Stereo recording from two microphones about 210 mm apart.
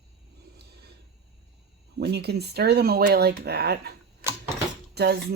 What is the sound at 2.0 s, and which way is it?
Speech, 50° right (ahead or behind).